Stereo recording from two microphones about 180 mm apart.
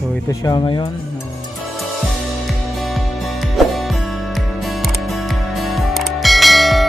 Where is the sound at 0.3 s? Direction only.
20° left (ahead or behind).